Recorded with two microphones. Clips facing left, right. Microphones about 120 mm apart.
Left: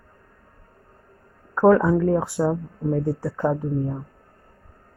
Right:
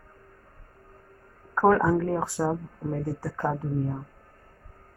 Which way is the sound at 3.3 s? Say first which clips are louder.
Left 3 dB; 20° left (ahead or behind).